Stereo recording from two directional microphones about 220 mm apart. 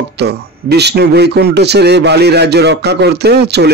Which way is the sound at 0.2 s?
50° right (ahead or behind).